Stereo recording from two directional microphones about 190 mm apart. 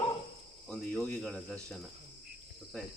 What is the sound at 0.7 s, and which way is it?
Speech, 5° left (ahead or behind).